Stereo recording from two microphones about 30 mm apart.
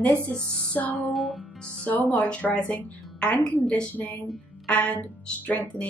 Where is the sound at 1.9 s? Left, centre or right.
Left.